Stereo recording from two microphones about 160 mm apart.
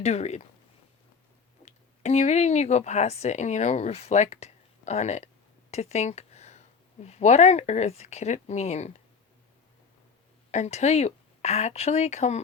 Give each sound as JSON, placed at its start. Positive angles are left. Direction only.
{"t": 0.0, "sound": "speech", "side_deg": 45}
{"t": 1.6, "sound": "speech", "side_deg": 45}
{"t": 10.5, "sound": "speech", "side_deg": 45}